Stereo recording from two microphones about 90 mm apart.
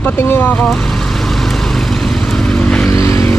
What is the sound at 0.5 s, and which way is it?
Vehicle, 10° left (ahead or behind).